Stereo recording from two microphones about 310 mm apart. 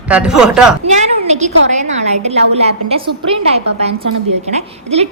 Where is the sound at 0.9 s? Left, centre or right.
Right.